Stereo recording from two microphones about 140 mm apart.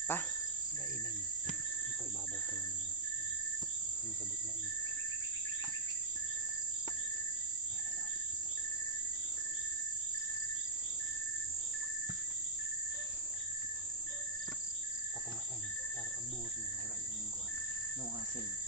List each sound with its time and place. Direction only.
0.1 s insect: 15° left (ahead or behind)